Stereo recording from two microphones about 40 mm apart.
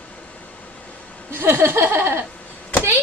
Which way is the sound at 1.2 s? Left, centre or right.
Right.